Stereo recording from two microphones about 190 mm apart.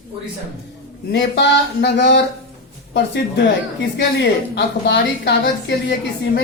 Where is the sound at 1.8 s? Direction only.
65° left (ahead or behind).